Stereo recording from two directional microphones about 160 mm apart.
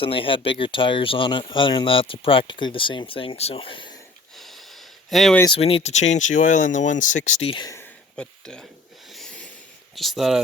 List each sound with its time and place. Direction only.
0.0 s speech: 35° left (ahead or behind)
4.4 s a sound: centre (ahead or behind)
5.0 s speech: centre (ahead or behind)
5.5 s speech: 35° left (ahead or behind)
7.4 s speech: 30° left (ahead or behind)
8.1 s a sound: 5° left (ahead or behind)
9.9 s speech: centre (ahead or behind)